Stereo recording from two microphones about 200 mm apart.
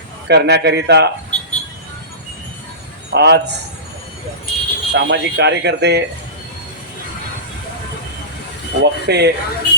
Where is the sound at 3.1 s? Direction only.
55° right (ahead or behind).